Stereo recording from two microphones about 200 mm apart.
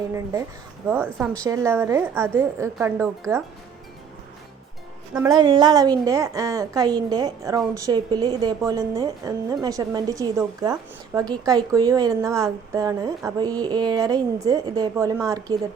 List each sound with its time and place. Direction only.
0.9 s a woman's voice: 10° right (ahead or behind)
5.1 s a woman's voice: 15° right (ahead or behind)